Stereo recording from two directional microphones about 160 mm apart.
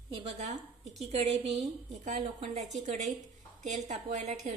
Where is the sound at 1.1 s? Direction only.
40° right (ahead or behind).